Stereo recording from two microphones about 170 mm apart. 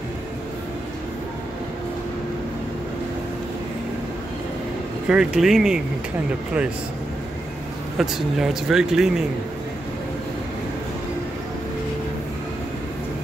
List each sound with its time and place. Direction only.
5.0 s speech: 5° right (ahead or behind)
8.0 s speech: centre (ahead or behind)